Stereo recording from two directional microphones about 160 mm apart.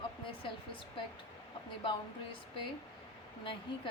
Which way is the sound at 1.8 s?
30° left (ahead or behind).